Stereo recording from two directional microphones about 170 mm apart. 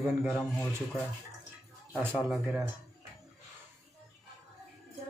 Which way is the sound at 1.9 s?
10° right (ahead or behind).